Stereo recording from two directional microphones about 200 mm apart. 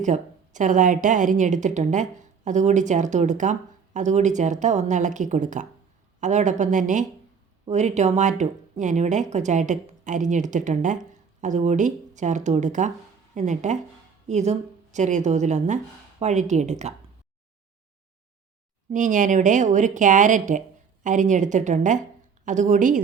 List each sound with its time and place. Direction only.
0.0 s a woman's voice: 35° right (ahead or behind)
18.9 s a woman's voice: 40° right (ahead or behind)